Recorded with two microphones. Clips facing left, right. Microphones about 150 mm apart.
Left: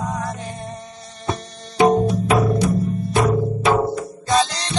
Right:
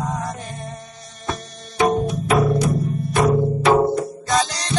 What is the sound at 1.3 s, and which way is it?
Music, 25° left (ahead or behind).